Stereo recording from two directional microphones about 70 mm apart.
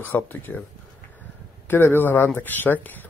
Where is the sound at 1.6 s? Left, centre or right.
Left.